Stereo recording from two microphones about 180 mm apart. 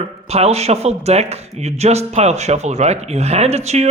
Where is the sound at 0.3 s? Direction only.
35° right (ahead or behind).